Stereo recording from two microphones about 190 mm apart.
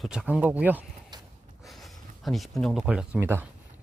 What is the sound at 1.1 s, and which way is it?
Snort, 20° right (ahead or behind).